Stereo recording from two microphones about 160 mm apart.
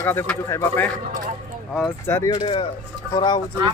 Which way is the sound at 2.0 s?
20° left (ahead or behind).